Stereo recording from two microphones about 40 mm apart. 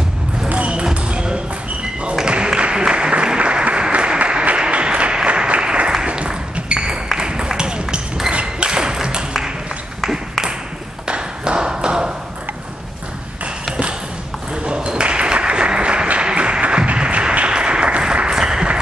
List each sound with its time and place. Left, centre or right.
0.5 s basketball bounce: right
2.2 s applause: right
6.5 s ping: right
7.2 s a sound: right
11.1 s tap: right
14.5 s applause: right
16.8 s music: right